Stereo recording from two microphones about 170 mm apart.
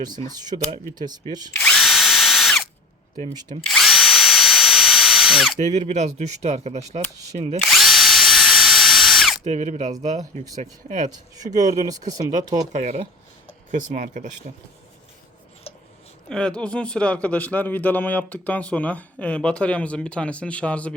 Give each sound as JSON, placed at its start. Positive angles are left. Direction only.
{"t": 0.3, "sound": "speech", "side_deg": -25}
{"t": 1.5, "sound": "drill", "side_deg": 10}
{"t": 1.8, "sound": "ratchet", "side_deg": 0}
{"t": 3.7, "sound": "drill", "side_deg": 0}
{"t": 5.6, "sound": "speech", "side_deg": -45}
{"t": 7.6, "sound": "drill", "side_deg": 0}
{"t": 9.4, "sound": "speech", "side_deg": -40}
{"t": 11.5, "sound": "speech", "side_deg": -20}
{"t": 12.7, "sound": "speech", "side_deg": -40}
{"t": 15.7, "sound": "a sound", "side_deg": 35}
{"t": 16.3, "sound": "speech", "side_deg": 5}